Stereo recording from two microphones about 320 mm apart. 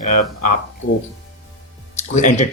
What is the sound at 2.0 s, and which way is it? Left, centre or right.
Speech, left.